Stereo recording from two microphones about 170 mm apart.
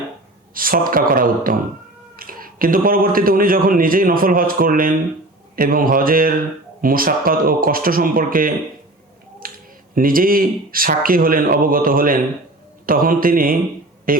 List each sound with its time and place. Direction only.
0.5 s a man's voice: 55° right (ahead or behind)
9.4 s finger snapping: 55° right (ahead or behind)
9.9 s a man's voice: 55° right (ahead or behind)